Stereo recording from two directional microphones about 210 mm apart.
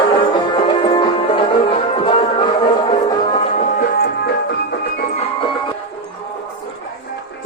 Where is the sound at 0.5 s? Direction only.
25° left (ahead or behind).